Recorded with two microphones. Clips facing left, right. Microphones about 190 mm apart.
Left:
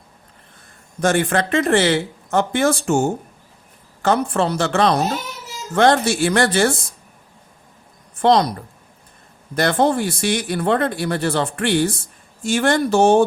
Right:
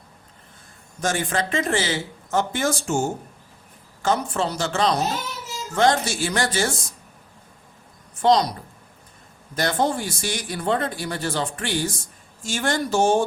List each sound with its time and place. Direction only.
1.0 s speech: 65° left (ahead or behind)
8.2 s speech: 55° left (ahead or behind)
9.6 s speech: 60° left (ahead or behind)